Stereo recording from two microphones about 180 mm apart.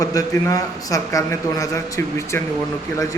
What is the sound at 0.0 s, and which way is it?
A man's voice, 20° left (ahead or behind).